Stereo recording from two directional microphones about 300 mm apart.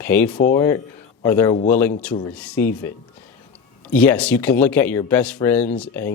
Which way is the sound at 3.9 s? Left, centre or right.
Centre.